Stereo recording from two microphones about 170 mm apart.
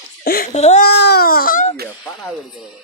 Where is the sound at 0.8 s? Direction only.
75° left (ahead or behind); by 1.7 s 55° left (ahead or behind).